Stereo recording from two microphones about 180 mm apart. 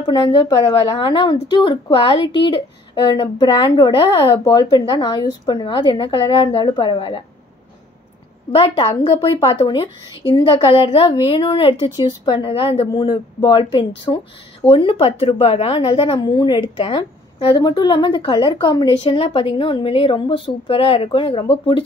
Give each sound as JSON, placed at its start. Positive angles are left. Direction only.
{"t": 0.0, "sound": "speech", "side_deg": 25}
{"t": 8.5, "sound": "a woman's voice", "side_deg": 30}